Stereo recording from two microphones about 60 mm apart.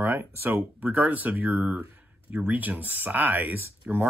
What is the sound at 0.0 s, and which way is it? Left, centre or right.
Speech, right.